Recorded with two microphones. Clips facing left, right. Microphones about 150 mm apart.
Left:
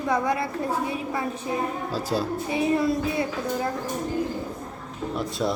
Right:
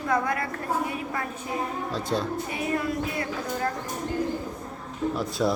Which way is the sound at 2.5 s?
25° left (ahead or behind).